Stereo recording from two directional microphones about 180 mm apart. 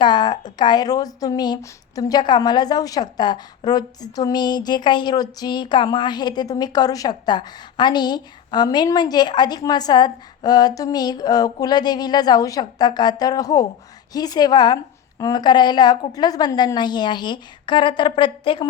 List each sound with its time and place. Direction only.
0.0 s a woman's voice: 25° left (ahead or behind)